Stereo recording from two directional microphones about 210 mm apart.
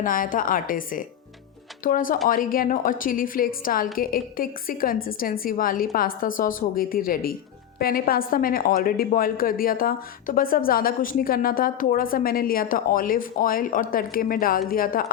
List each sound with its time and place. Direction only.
0.0 s a woman's voice: 40° left (ahead or behind)